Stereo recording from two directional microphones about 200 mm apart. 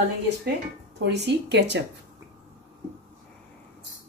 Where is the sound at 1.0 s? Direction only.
60° right (ahead or behind).